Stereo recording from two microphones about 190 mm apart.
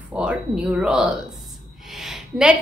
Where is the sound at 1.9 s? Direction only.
Centre (ahead or behind).